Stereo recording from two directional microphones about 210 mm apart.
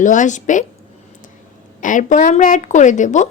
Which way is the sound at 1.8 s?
40° left (ahead or behind).